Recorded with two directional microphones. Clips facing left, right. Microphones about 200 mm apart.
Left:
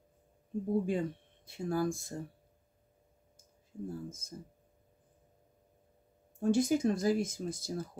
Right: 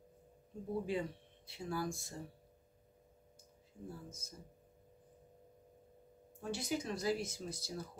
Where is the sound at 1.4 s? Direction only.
50° left (ahead or behind).